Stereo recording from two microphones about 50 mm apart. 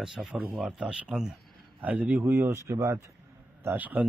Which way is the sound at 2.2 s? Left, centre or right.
Right.